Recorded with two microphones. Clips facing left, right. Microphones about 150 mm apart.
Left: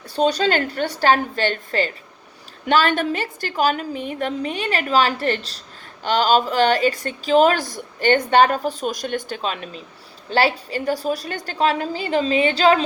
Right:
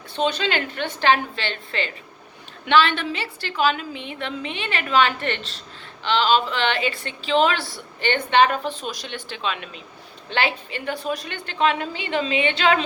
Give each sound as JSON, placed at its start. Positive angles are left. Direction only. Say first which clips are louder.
{"t": 0.2, "sound": "a woman's voice", "louder": "left 5 dB", "side_deg": 40}